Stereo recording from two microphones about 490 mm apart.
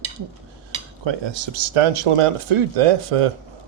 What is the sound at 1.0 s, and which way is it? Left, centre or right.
Speech, right.